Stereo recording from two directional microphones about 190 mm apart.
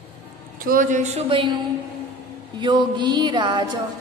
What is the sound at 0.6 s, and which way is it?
Speech, 45° right (ahead or behind).